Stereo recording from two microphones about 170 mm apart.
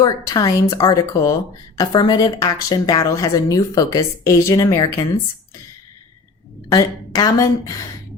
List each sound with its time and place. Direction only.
0.0 s speech: 20° left (ahead or behind)
6.7 s speech: 20° left (ahead or behind)